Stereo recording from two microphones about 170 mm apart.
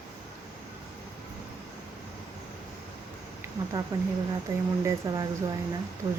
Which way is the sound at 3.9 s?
15° right (ahead or behind).